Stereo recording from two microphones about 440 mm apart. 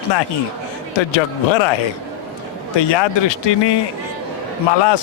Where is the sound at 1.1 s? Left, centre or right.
Left.